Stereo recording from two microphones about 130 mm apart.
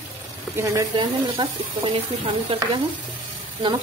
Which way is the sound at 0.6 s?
30° right (ahead or behind).